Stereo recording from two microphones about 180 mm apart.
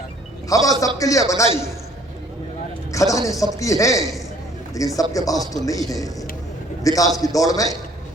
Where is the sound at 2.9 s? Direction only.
15° left (ahead or behind).